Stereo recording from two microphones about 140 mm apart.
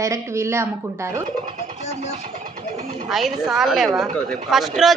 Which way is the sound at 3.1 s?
5° right (ahead or behind).